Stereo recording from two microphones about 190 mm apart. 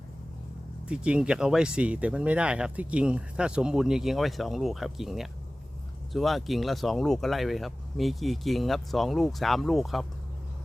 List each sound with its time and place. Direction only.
0.9 s speech: 5° right (ahead or behind)